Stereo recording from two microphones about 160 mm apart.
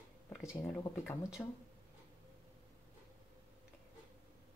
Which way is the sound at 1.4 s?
5° left (ahead or behind).